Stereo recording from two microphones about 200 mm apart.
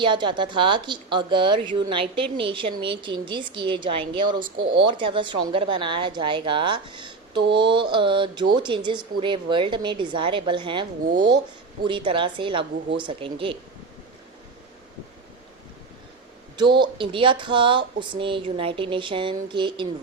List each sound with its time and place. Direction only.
0.0 s speech: 25° right (ahead or behind)
16.6 s speech: 25° right (ahead or behind)